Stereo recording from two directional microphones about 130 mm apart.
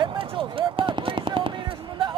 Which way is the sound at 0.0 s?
40° right (ahead or behind).